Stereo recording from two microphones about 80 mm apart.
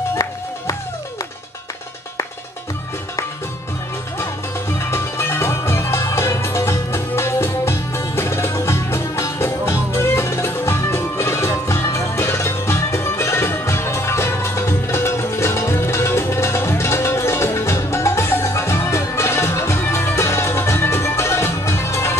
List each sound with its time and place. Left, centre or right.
4.2 s music: left